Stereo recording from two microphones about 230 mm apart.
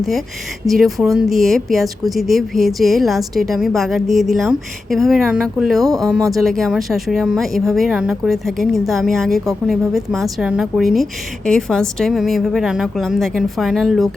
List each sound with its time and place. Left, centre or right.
0.6 s speech: centre
5.8 s speech: centre
6.3 s speech: centre